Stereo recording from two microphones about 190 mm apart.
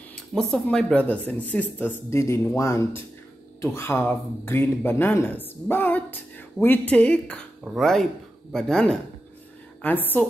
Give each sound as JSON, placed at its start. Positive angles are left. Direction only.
{"t": 0.1, "sound": "speech", "side_deg": 5}